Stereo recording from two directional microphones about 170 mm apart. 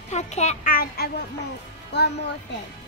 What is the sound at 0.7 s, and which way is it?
Speech, 60° left (ahead or behind).